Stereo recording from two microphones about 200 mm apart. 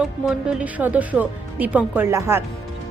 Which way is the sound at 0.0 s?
5° right (ahead or behind).